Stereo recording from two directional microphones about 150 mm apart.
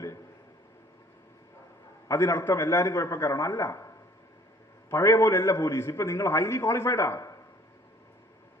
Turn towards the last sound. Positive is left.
turn(degrees=20)  # may be behind; listen again after turning